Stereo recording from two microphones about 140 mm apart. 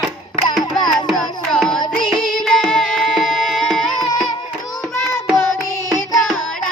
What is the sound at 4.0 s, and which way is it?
Music, 30° left (ahead or behind).